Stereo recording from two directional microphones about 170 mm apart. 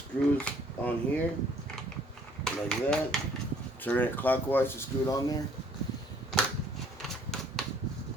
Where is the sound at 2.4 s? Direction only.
5° left (ahead or behind).